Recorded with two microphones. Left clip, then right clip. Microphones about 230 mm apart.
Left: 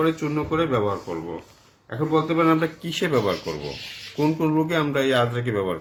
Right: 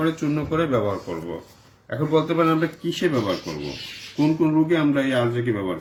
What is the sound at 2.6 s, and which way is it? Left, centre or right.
Speech, left.